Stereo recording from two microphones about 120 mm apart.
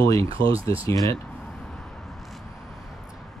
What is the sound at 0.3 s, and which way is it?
Speech, 50° right (ahead or behind).